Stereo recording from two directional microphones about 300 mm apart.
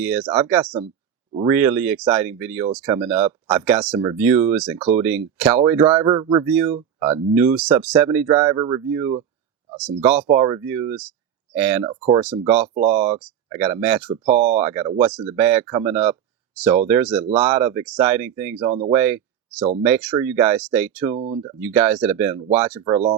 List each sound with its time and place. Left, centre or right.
0.0 s speech: centre
11.9 s speech: centre
12.2 s speech: centre